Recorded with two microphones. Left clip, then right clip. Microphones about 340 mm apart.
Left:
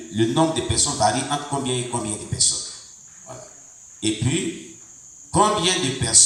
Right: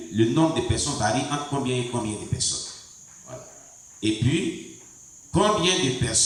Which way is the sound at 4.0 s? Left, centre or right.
Centre.